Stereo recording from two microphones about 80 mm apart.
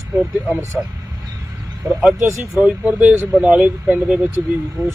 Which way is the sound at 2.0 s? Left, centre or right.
Centre.